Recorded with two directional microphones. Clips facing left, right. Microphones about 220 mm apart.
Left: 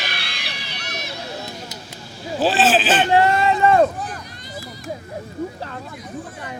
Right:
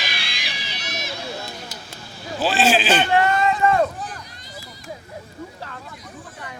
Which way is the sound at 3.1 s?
30° left (ahead or behind).